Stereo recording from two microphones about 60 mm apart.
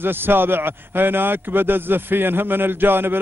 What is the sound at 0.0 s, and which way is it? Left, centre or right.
A man's voice, right.